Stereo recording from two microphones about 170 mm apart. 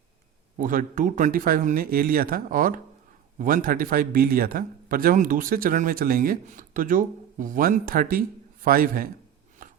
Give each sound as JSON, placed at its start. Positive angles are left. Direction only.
{"t": 0.6, "sound": "a man's voice", "side_deg": -50}